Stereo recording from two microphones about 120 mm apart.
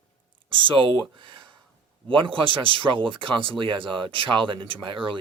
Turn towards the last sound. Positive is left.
turn(degrees=-45)  # may be behind; listen again after turning